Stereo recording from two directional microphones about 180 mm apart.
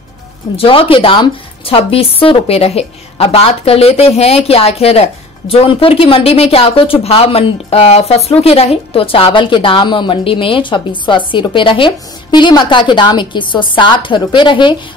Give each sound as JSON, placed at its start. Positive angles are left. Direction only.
{"t": 0.6, "sound": "a woman's voice", "side_deg": 30}